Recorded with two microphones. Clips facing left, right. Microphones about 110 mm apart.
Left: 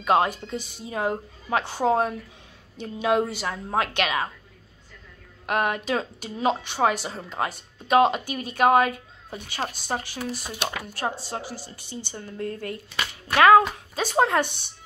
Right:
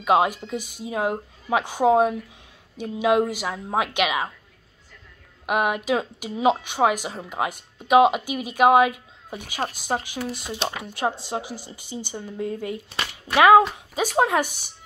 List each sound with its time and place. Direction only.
0.0 s a woman's voice: 10° right (ahead or behind)
5.5 s a woman's voice: 10° right (ahead or behind)